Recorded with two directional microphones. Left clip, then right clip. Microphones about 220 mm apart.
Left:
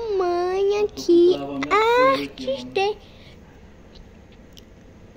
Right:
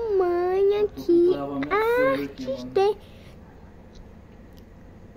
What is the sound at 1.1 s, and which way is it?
Speech, 5° right (ahead or behind).